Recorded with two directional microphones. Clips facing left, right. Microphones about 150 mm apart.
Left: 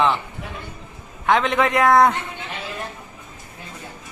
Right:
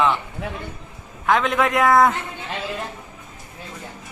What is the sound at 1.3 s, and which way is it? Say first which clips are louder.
Speech: left 1 dB; centre (ahead or behind).